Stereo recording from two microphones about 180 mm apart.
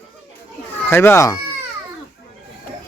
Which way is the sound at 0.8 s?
15° left (ahead or behind).